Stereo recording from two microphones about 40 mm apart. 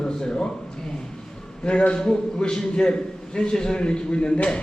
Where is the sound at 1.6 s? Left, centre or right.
Left.